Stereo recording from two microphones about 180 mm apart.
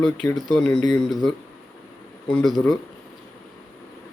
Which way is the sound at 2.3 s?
Centre (ahead or behind).